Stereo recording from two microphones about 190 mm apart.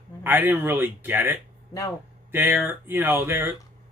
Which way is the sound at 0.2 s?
10° right (ahead or behind).